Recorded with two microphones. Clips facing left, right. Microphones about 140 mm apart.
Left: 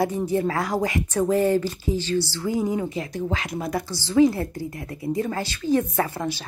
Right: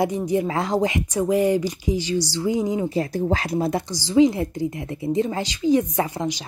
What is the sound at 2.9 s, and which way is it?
Speech, 35° right (ahead or behind).